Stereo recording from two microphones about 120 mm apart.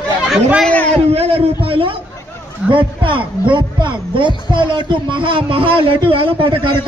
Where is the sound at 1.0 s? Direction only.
55° right (ahead or behind).